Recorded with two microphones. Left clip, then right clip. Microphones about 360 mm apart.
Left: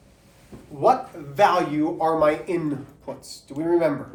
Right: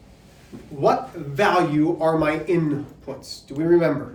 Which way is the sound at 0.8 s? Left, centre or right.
Centre.